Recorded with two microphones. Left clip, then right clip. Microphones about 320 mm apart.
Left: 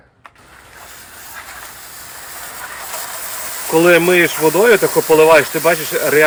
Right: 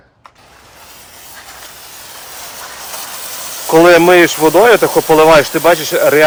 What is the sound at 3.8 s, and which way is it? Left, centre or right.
Speech, right.